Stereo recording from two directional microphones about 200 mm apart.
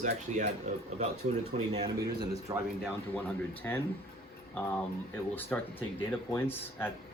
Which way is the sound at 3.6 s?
10° left (ahead or behind).